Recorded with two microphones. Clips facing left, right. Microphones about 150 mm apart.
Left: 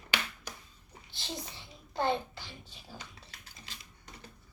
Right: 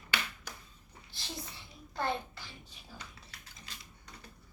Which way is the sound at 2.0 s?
25° left (ahead or behind).